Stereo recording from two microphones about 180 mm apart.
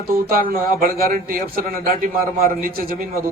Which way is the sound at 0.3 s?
55° right (ahead or behind).